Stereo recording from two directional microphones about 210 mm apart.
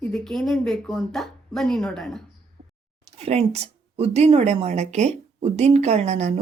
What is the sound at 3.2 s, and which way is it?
A woman's voice, 30° right (ahead or behind).